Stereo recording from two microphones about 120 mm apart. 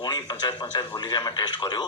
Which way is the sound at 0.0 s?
35° left (ahead or behind).